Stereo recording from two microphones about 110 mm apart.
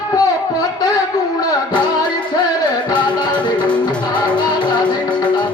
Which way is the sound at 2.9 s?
40° left (ahead or behind).